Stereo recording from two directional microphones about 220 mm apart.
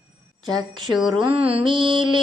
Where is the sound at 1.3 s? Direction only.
25° right (ahead or behind).